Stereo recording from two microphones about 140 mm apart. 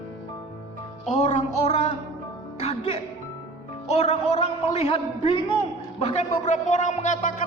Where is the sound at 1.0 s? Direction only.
55° left (ahead or behind).